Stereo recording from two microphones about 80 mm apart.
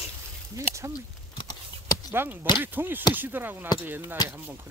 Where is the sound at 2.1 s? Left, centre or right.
Right.